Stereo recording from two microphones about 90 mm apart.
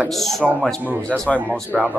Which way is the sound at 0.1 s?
5° left (ahead or behind).